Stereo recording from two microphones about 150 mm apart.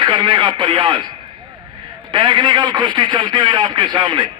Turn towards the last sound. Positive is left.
turn(degrees=-30)  # may be behind; listen again after turning